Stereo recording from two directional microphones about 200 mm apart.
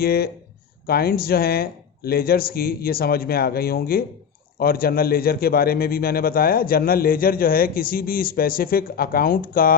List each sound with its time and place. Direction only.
0.0 s a man's voice: 50° left (ahead or behind)